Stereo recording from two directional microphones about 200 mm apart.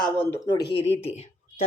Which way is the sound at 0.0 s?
15° left (ahead or behind).